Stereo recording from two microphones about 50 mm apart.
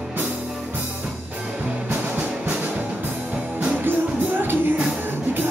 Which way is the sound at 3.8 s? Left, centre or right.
Right.